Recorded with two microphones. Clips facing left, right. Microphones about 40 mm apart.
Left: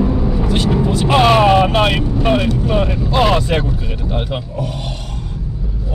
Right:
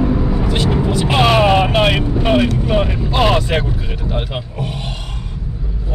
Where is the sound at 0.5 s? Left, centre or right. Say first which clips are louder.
Left 1 dB; centre.